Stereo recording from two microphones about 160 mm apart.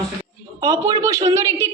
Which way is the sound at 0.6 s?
20° right (ahead or behind).